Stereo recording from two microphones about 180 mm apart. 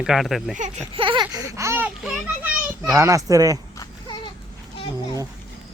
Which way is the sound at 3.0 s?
15° right (ahead or behind).